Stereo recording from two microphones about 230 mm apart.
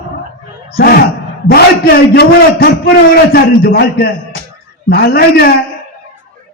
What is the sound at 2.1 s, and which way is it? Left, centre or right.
A man's voice, left.